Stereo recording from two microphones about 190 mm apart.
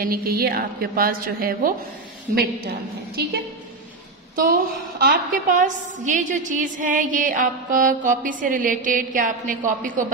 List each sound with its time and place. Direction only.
0.0 s a woman's voice: 50° right (ahead or behind)
4.4 s a woman's voice: 50° right (ahead or behind)